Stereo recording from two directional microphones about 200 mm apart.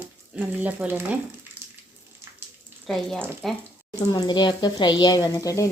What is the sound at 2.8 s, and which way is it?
Speech, centre (ahead or behind).